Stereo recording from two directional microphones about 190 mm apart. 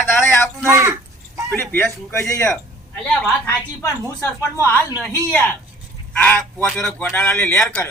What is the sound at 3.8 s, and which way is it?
Speech, 15° left (ahead or behind).